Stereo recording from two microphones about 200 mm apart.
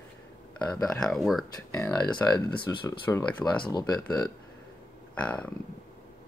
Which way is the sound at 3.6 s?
20° left (ahead or behind).